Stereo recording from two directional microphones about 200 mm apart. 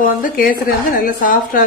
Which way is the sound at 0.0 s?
45° left (ahead or behind).